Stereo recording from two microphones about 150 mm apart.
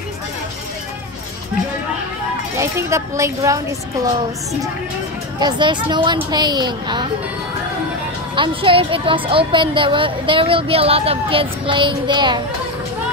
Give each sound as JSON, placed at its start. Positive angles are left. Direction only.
{"t": 2.5, "sound": "speech", "side_deg": -20}
{"t": 5.4, "sound": "speech", "side_deg": -30}
{"t": 8.4, "sound": "speech", "side_deg": -35}